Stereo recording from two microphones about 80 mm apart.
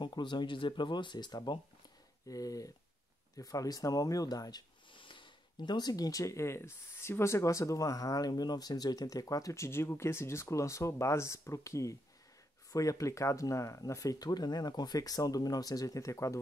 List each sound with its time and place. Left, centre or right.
0.0 s speech: left
2.2 s speech: left
4.9 s speech: left